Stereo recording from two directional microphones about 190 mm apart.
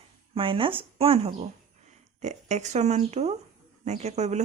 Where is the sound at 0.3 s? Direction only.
30° right (ahead or behind).